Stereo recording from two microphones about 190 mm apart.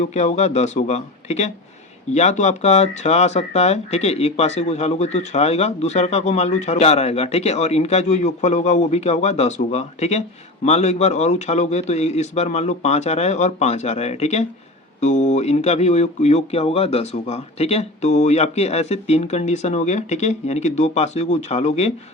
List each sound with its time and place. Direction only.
0.0 s speech: 40° left (ahead or behind)